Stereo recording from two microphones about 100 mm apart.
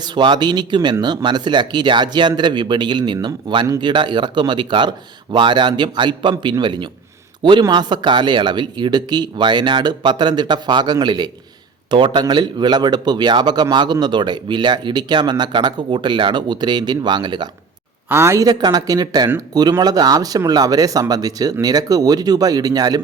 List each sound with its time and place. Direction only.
0.0 s speech: 50° right (ahead or behind)
18.1 s speech: 25° right (ahead or behind)
18.4 s speech: 40° right (ahead or behind)